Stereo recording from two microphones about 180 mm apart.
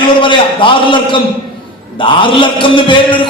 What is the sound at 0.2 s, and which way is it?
A man's voice, 30° left (ahead or behind).